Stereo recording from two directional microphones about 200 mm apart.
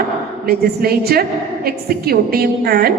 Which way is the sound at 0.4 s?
50° right (ahead or behind).